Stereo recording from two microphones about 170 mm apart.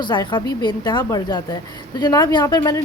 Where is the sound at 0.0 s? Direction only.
25° left (ahead or behind).